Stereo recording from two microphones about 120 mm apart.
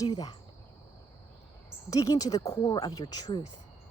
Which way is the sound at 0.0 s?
30° left (ahead or behind).